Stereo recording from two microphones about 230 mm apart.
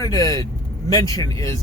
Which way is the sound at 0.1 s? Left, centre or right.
Centre.